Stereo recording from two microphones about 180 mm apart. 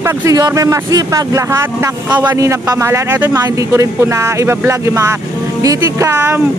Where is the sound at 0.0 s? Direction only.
15° right (ahead or behind).